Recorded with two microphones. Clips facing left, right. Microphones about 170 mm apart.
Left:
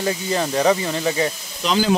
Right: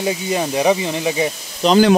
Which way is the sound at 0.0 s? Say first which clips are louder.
Right 2 dB; 10° right (ahead or behind).